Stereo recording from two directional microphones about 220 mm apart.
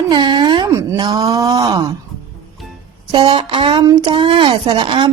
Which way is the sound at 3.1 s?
20° right (ahead or behind).